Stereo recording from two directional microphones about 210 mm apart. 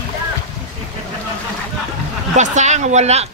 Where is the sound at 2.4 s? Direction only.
35° right (ahead or behind).